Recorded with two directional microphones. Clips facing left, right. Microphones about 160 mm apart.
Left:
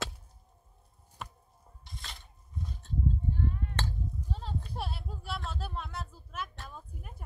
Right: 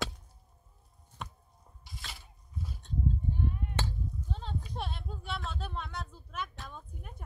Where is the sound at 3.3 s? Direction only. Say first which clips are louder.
Left 1 dB; 15° right (ahead or behind).